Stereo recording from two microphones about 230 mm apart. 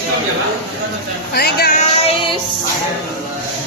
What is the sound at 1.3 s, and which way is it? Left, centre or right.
Speech, left.